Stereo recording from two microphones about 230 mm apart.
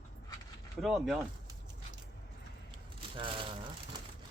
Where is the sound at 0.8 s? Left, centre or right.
Centre.